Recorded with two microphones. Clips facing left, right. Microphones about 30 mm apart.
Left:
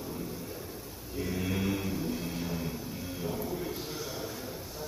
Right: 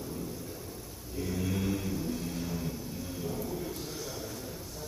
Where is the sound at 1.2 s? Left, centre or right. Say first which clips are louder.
Left 1 dB; centre.